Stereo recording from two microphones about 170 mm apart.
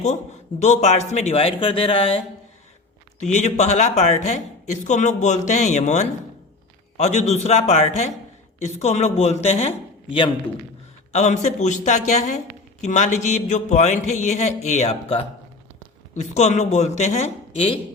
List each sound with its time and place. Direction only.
0.6 s speech: 40° left (ahead or behind)
3.2 s a woman's voice: 45° left (ahead or behind)
11.1 s a woman's voice: 40° left (ahead or behind)